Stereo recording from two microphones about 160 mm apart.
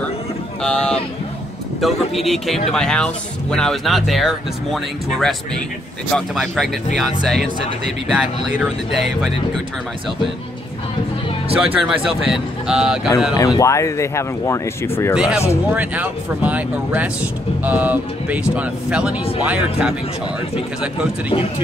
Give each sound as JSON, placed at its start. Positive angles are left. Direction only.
{"t": 0.6, "sound": "speech", "side_deg": 5}
{"t": 11.6, "sound": "speech", "side_deg": -5}
{"t": 13.4, "sound": "speech", "side_deg": 20}
{"t": 15.1, "sound": "speech", "side_deg": -5}